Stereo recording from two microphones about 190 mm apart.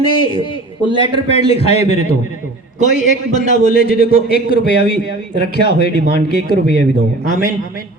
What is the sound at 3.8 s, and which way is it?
A man's voice, 55° left (ahead or behind).